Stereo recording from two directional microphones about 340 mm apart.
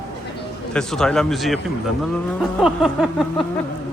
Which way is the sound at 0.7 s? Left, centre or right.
Centre.